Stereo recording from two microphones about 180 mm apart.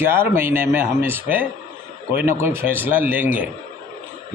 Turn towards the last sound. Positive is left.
turn(degrees=-10)  # may be behind; listen again after turning